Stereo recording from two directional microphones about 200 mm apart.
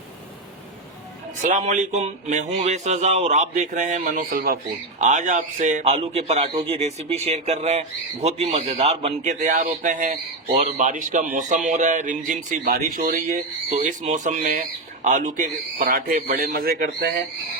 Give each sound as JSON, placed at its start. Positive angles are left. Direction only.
{"t": 1.4, "sound": "a man's voice", "side_deg": -40}